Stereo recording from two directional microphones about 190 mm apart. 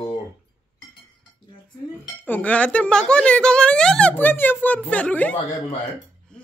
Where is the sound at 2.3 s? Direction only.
5° left (ahead or behind).